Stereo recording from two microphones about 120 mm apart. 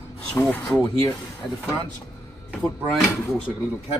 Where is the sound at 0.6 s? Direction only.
30° left (ahead or behind).